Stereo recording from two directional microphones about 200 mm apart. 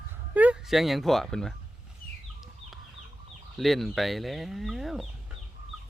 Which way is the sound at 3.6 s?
Centre (ahead or behind).